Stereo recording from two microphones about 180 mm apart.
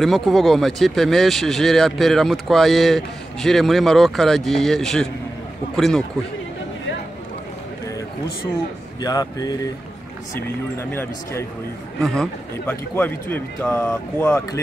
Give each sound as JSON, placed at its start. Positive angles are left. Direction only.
{"t": 0.0, "sound": "speech", "side_deg": 0}
{"t": 9.0, "sound": "speech", "side_deg": 20}